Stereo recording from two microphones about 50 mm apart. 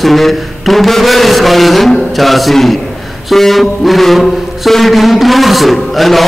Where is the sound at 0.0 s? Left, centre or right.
Centre.